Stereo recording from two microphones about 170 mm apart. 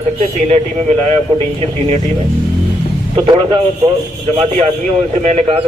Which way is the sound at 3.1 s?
25° right (ahead or behind).